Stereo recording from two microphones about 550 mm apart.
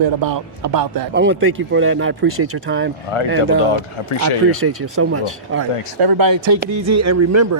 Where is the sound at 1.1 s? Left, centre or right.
Centre.